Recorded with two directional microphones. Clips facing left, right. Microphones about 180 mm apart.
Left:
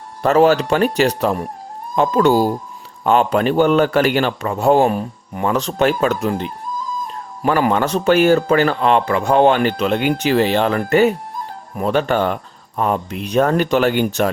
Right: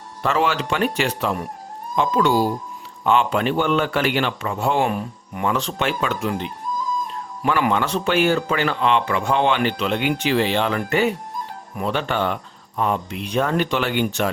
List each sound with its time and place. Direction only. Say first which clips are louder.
0.2 s a man's voice: left 8 dB; 40° left (ahead or behind)